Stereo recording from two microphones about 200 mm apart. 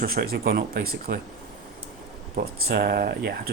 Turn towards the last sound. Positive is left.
turn(degrees=-50)  # may be behind; listen again after turning